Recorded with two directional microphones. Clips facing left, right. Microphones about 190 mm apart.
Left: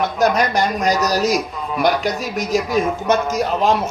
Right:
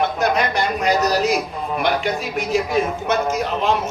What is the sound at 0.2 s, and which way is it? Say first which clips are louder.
A man's voice: left 3 dB; 40° left (ahead or behind).